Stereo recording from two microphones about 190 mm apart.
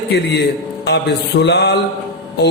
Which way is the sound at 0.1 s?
60° left (ahead or behind).